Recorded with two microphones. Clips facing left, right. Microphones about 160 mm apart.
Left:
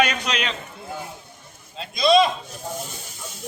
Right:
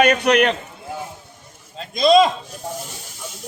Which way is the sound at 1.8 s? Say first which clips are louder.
Right 3 dB; 45° right (ahead or behind).